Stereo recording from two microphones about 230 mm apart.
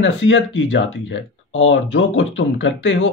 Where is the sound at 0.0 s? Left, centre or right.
Left.